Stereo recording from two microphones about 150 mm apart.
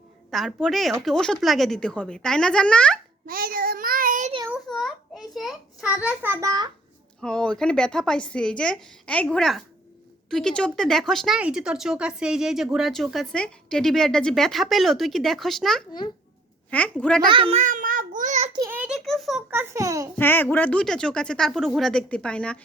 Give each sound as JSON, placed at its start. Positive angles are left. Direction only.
{"t": 0.3, "sound": "speech", "side_deg": 0}
{"t": 3.2, "sound": "child singing", "side_deg": -70}
{"t": 4.7, "sound": "a child's voice", "side_deg": 0}
{"t": 7.2, "sound": "a woman's voice", "side_deg": 5}
{"t": 17.2, "sound": "a child's voice", "side_deg": -35}
{"t": 18.7, "sound": "a sound", "side_deg": -5}
{"t": 19.5, "sound": "a child's voice", "side_deg": -15}
{"t": 20.1, "sound": "speech", "side_deg": 15}